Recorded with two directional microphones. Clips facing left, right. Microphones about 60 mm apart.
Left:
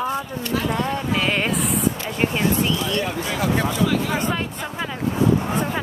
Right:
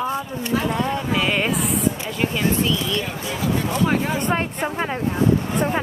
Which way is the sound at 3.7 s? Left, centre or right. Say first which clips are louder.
Right 1 dB; right.